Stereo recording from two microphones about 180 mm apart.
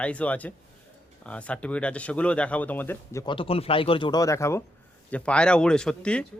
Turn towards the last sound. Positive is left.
turn(degrees=5)  # may be behind; listen again after turning